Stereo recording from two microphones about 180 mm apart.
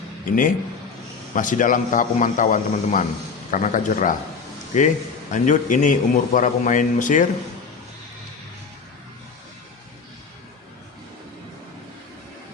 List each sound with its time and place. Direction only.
0.3 s a man's voice: 50° left (ahead or behind)
5.3 s a man's voice: 45° left (ahead or behind)